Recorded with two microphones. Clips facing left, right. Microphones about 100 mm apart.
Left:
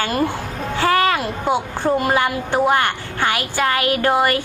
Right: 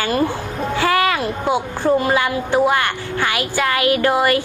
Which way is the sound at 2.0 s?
45° left (ahead or behind).